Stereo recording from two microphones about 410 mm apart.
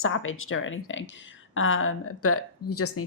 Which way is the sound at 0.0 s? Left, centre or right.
Left.